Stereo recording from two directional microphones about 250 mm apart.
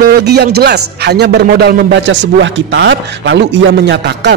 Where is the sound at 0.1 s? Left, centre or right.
Right.